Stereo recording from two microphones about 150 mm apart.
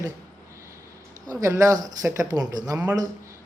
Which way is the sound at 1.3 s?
20° right (ahead or behind).